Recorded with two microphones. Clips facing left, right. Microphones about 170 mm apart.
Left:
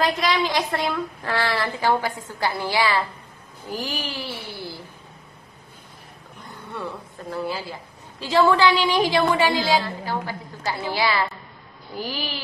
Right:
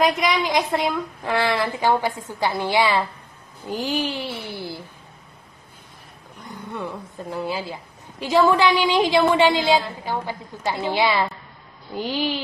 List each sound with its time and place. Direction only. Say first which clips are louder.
0.0 s a woman's voice: right 2 dB; 20° right (ahead or behind)
6.7 s a woman's voice: right 1 dB; 15° right (ahead or behind)